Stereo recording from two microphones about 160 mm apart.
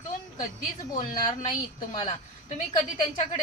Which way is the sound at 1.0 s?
30° left (ahead or behind).